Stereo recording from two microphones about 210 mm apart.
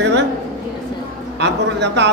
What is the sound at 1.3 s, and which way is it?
Speech, 55° right (ahead or behind).